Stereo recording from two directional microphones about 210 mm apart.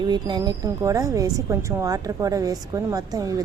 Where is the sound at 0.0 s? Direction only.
20° right (ahead or behind).